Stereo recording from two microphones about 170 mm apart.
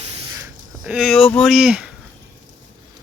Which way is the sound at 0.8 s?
5° right (ahead or behind).